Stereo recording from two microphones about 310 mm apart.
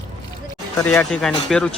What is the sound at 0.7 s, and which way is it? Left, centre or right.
Speech, centre.